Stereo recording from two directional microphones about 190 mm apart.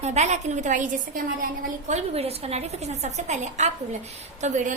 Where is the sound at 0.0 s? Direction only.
35° right (ahead or behind).